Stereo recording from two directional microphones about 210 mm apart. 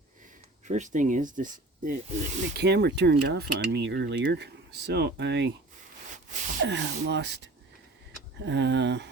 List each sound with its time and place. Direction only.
0.7 s speech: 35° right (ahead or behind); by 5.5 s 55° right (ahead or behind)
6.7 s speech: 55° right (ahead or behind)